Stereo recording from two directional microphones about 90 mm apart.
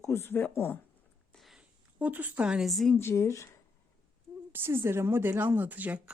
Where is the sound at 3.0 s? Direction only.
30° left (ahead or behind).